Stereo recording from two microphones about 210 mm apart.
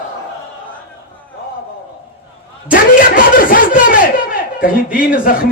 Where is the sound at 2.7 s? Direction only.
40° left (ahead or behind).